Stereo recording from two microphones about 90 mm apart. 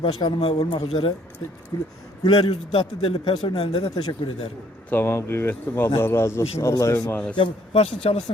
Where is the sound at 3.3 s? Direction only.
60° left (ahead or behind); by 3.9 s 80° left.